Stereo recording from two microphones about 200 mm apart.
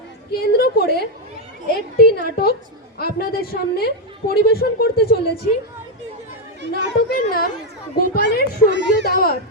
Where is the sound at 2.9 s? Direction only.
50° left (ahead or behind).